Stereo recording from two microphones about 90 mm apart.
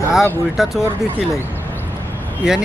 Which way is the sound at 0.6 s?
5° right (ahead or behind).